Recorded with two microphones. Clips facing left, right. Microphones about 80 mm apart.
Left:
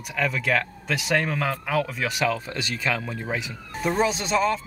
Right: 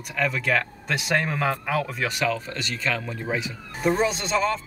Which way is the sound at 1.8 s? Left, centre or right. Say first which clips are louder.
Even; centre.